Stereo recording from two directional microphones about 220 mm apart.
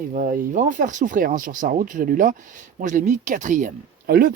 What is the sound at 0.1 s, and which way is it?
Speech, 35° right (ahead or behind).